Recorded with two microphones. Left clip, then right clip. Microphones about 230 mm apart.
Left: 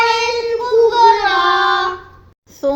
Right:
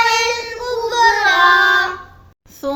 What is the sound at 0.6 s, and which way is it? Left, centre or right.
Music, right.